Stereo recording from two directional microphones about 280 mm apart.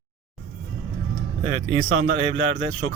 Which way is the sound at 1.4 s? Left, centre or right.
Centre.